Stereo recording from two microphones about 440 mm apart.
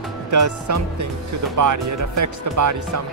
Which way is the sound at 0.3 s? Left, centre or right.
Right.